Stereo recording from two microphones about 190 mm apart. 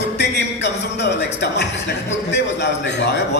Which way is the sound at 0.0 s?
65° left (ahead or behind).